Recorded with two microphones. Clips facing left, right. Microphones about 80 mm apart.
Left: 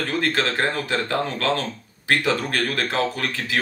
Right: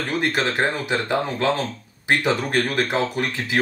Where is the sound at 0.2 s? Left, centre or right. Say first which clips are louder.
Right 2 dB; centre.